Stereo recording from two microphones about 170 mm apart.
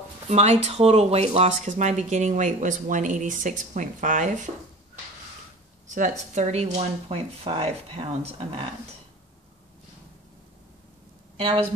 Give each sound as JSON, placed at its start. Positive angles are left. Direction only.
{"t": 0.3, "sound": "speech", "side_deg": -40}
{"t": 5.9, "sound": "speech", "side_deg": -45}
{"t": 11.3, "sound": "speech", "side_deg": -30}